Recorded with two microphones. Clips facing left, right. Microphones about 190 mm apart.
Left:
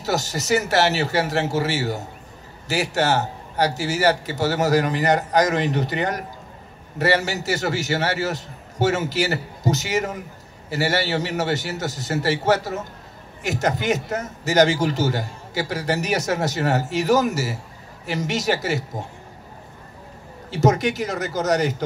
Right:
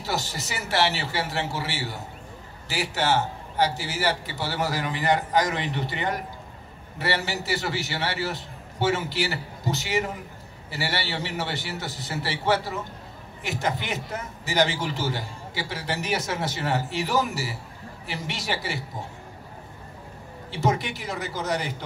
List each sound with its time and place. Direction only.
0.0 s a man's voice: 45° left (ahead or behind)
20.5 s a man's voice: 45° left (ahead or behind)